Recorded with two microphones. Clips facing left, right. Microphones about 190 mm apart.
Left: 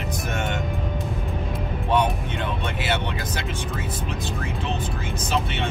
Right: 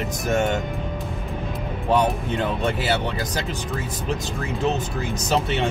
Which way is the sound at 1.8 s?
40° right (ahead or behind).